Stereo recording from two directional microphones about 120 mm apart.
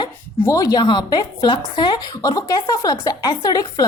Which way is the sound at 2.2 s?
30° left (ahead or behind).